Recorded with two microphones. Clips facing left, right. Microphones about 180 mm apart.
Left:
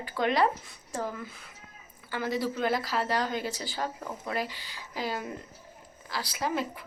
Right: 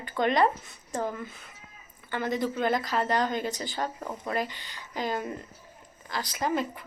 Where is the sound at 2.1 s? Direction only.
5° left (ahead or behind).